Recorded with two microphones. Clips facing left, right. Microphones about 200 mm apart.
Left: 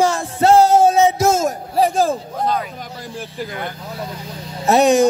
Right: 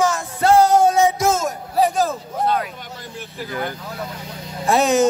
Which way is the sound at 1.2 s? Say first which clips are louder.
Left 3 dB; 25° left (ahead or behind).